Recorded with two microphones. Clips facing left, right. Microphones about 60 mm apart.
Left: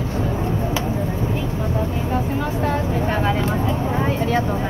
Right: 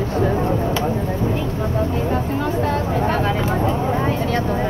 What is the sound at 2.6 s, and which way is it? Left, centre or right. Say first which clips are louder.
Speech: right 1 dB; centre.